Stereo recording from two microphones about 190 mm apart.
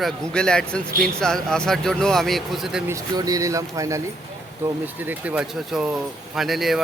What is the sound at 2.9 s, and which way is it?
Speech, 20° right (ahead or behind).